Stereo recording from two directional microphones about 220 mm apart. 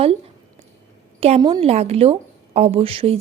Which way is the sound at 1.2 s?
25° right (ahead or behind).